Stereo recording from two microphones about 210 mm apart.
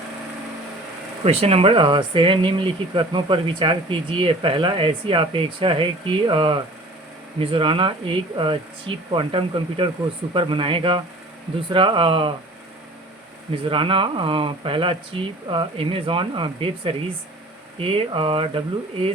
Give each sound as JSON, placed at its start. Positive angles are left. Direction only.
{"t": 1.2, "sound": "speech", "side_deg": -30}
{"t": 13.7, "sound": "speech", "side_deg": -25}